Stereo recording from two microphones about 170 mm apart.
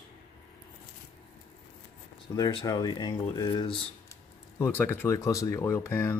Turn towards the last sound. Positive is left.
turn(degrees=15)  # may be behind; listen again after turning